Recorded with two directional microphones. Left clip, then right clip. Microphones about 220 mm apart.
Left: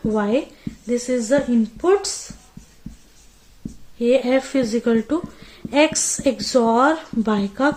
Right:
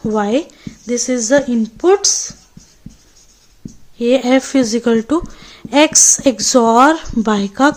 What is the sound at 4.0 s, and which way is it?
Speech, 45° right (ahead or behind).